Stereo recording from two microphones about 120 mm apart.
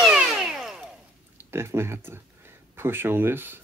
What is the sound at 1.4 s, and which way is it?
Speech, 20° right (ahead or behind).